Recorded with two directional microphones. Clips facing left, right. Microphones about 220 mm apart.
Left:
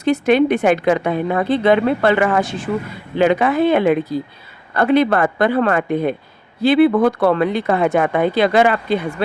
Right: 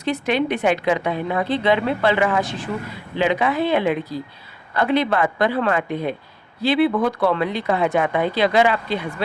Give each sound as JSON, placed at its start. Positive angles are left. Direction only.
{"t": 0.0, "sound": "a woman's voice", "side_deg": 45}